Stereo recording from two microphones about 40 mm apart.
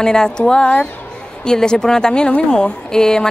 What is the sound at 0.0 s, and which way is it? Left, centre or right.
A woman's voice, centre.